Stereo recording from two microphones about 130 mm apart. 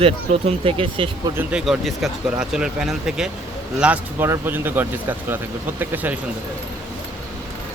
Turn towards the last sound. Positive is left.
turn(degrees=-15)  # may be behind; listen again after turning